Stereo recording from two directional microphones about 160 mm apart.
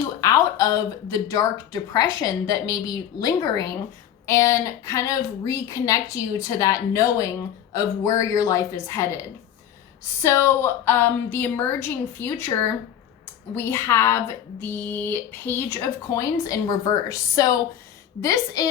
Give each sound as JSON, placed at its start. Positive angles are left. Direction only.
{"t": 0.2, "sound": "a woman's voice", "side_deg": 20}
{"t": 13.5, "sound": "a woman's voice", "side_deg": 15}